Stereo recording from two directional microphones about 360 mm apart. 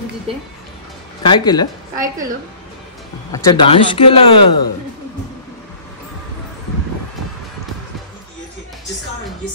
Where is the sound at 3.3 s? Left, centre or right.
Centre.